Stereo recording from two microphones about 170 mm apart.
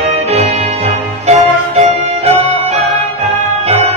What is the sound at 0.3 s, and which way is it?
Music, 40° right (ahead or behind).